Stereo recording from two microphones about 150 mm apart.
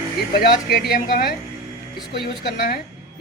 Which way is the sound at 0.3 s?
90° left.